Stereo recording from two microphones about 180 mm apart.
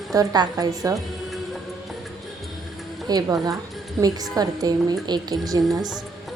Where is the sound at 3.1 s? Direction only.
20° right (ahead or behind).